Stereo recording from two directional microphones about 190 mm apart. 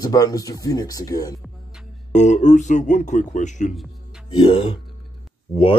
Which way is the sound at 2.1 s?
40° left (ahead or behind).